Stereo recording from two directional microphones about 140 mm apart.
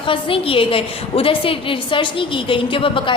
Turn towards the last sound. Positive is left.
turn(degrees=40)  # may be behind; listen again after turning